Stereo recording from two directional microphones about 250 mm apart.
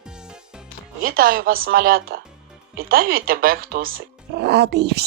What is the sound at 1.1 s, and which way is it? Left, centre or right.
Speech, right.